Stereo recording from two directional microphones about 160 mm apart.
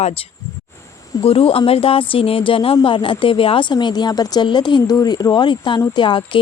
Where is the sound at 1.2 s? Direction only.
35° left (ahead or behind).